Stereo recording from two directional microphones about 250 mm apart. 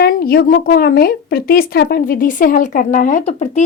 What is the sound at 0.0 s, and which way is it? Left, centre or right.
A woman's voice, left.